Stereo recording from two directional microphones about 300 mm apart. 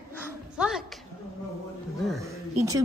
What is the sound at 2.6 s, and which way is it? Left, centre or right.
Speech, centre.